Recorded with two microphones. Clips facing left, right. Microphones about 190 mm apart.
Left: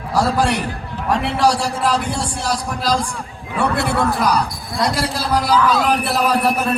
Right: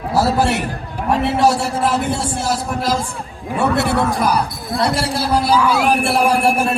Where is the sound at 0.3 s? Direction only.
25° right (ahead or behind).